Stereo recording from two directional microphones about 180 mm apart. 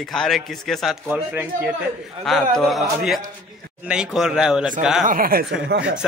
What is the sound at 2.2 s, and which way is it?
Speech, centre (ahead or behind).